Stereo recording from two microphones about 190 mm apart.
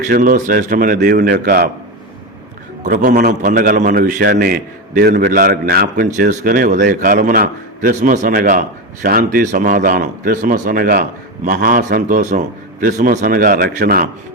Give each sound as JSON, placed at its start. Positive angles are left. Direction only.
{"t": 0.2, "sound": "a man's voice", "side_deg": -45}
{"t": 2.8, "sound": "a man's voice", "side_deg": -45}